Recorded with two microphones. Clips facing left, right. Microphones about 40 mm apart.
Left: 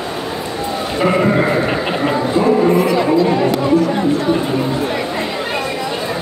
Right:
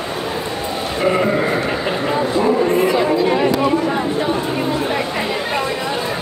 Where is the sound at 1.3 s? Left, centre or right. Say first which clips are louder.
Left 3 dB; left.